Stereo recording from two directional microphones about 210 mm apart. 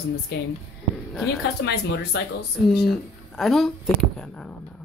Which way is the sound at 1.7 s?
50° left (ahead or behind).